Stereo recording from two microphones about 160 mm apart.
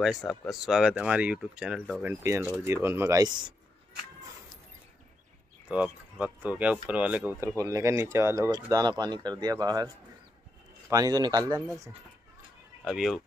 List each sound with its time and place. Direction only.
0.0 s speech: centre (ahead or behind); by 3.5 s 25° right (ahead or behind)
5.7 s speech: 10° right (ahead or behind); by 9.8 s 25° right (ahead or behind)
10.9 s speech: 25° right (ahead or behind)
12.8 s speech: centre (ahead or behind)